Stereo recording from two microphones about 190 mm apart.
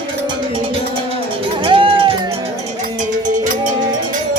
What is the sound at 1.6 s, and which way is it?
Cowbell, 30° right (ahead or behind).